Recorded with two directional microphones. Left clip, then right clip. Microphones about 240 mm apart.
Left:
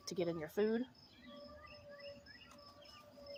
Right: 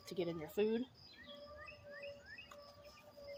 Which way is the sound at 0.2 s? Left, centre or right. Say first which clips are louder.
Left 1 dB; left.